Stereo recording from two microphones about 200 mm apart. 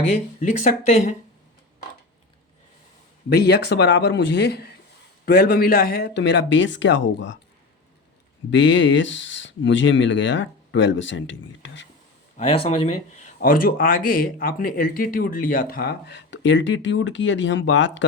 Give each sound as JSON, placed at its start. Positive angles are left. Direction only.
{"t": 0.0, "sound": "speech", "side_deg": 35}
{"t": 3.2, "sound": "speech", "side_deg": 55}
{"t": 8.4, "sound": "speech", "side_deg": 65}
{"t": 12.4, "sound": "speech", "side_deg": 30}
{"t": 13.4, "sound": "speech", "side_deg": 45}